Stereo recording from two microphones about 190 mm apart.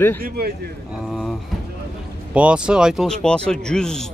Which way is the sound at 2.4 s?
5° right (ahead or behind).